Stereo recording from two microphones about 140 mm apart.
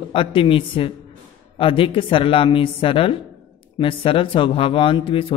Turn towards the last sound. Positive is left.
turn(degrees=40)  # may be behind; listen again after turning